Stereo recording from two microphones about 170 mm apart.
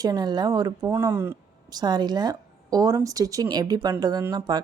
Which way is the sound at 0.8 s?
15° right (ahead or behind).